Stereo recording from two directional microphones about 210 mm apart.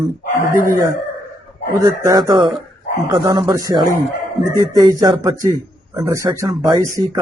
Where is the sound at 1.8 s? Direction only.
20° right (ahead or behind).